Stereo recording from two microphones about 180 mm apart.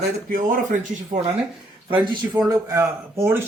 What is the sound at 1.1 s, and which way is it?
Speech, 40° right (ahead or behind).